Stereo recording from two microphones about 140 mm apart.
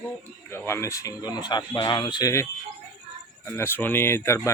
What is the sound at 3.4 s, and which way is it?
Speech, 15° left (ahead or behind).